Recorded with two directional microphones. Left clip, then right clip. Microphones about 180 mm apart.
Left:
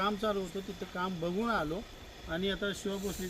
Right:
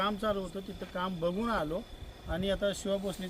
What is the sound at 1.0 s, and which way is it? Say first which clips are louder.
Speech: right 2 dB; 10° right (ahead or behind).